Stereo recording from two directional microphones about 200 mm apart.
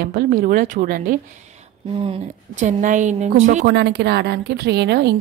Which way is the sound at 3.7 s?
55° right (ahead or behind).